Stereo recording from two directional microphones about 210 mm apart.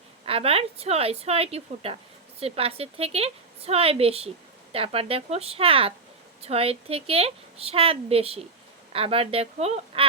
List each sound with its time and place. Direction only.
0.3 s a woman's voice: 25° right (ahead or behind)